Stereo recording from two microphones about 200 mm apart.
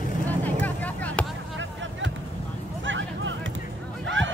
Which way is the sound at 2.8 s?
70° right (ahead or behind).